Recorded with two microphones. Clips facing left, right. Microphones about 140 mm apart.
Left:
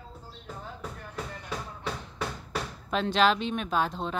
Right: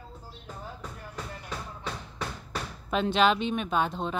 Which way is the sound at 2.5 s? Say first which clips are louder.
Even; 5° right (ahead or behind).